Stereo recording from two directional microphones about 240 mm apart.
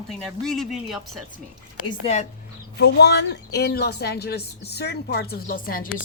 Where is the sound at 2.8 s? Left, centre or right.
Left.